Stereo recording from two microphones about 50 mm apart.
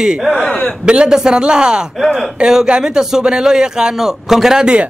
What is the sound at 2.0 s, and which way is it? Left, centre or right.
Speech, centre.